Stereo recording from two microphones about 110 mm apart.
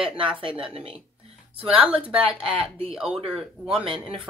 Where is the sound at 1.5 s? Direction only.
15° right (ahead or behind).